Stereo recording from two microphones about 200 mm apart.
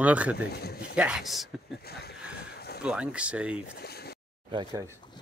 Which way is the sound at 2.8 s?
5° right (ahead or behind).